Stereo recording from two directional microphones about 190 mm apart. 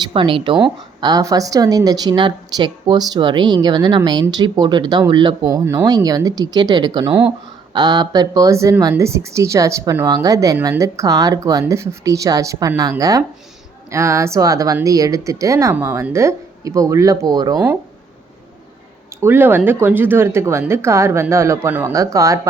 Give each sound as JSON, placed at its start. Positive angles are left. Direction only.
{"t": 0.0, "sound": "speech", "side_deg": -25}
{"t": 19.2, "sound": "speech", "side_deg": -10}